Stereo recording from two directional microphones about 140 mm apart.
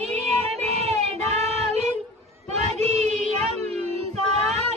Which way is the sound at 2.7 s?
55° right (ahead or behind).